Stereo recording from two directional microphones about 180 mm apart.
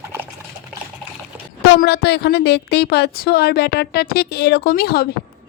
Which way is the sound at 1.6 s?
70° left (ahead or behind).